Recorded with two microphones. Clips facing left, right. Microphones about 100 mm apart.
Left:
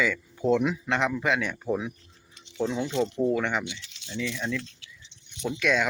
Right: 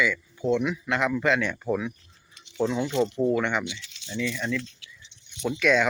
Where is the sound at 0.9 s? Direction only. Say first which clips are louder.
Right 3 dB; 20° left (ahead or behind).